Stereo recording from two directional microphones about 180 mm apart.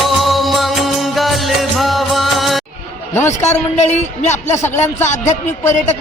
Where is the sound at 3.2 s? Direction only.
40° left (ahead or behind).